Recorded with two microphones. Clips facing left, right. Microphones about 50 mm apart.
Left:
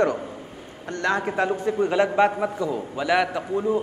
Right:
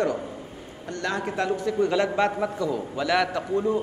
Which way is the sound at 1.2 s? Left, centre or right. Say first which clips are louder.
Left 2 dB; left.